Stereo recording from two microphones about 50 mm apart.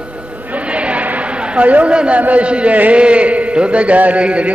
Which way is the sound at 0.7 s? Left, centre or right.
Right.